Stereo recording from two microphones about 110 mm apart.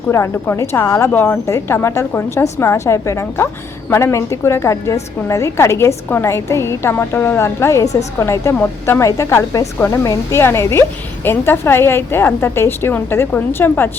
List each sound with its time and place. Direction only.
0.1 s a woman's voice: 25° left (ahead or behind)
9.0 s a woman's voice: 25° left (ahead or behind)